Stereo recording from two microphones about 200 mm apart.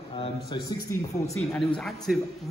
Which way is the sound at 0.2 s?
25° left (ahead or behind).